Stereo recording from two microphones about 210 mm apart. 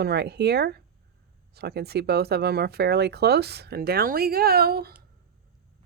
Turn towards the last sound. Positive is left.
turn(degrees=-45)  # may be behind; listen again after turning